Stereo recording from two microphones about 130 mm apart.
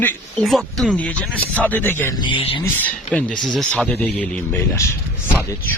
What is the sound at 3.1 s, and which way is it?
Speech, 10° left (ahead or behind).